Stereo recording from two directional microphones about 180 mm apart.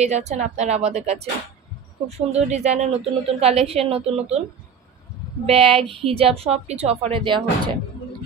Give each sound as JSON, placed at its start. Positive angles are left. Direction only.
{"t": 0.0, "sound": "a woman's voice", "side_deg": -40}
{"t": 5.5, "sound": "a woman's voice", "side_deg": -30}